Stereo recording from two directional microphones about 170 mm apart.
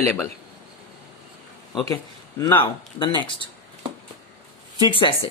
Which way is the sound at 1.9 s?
20° left (ahead or behind).